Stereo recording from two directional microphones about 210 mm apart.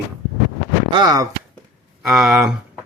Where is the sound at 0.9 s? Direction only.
20° right (ahead or behind).